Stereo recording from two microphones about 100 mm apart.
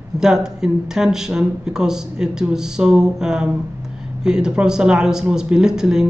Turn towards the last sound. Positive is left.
turn(degrees=-5)  # may be behind; listen again after turning